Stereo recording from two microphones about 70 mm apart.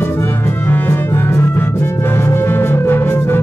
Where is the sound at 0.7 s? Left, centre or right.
Left.